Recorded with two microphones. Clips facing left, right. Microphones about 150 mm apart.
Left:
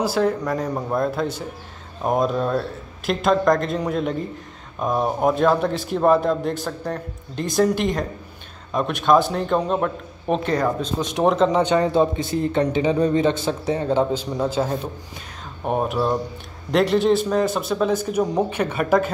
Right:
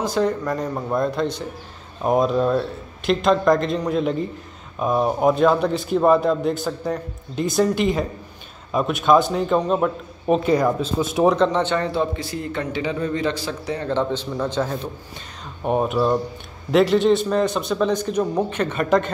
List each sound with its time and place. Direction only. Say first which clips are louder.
0.0 s a man's voice: left 1 dB; 5° left (ahead or behind)
11.6 s speech: left 4 dB; 15° left (ahead or behind)
13.8 s a man's voice: left 1 dB; 10° left (ahead or behind)